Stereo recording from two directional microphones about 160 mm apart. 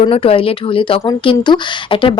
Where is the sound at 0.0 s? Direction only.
35° left (ahead or behind).